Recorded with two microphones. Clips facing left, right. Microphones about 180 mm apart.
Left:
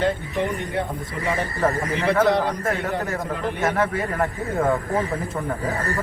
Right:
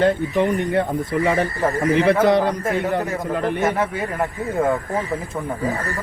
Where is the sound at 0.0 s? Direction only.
50° right (ahead or behind).